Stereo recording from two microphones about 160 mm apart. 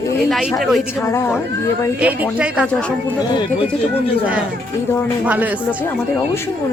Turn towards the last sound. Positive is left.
turn(degrees=-10)  # may be behind; listen again after turning